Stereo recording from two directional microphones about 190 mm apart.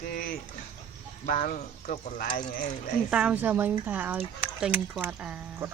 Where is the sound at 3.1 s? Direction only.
5° right (ahead or behind).